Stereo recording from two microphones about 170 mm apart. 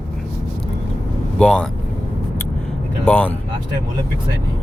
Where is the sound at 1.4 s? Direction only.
5° left (ahead or behind).